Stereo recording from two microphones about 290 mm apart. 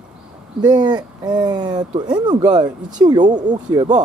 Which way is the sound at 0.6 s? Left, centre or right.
Centre.